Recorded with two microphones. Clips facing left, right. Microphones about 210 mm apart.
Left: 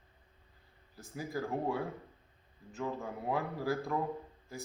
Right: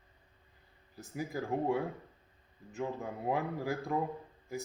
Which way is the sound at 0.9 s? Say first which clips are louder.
Right 1 dB; 15° right (ahead or behind).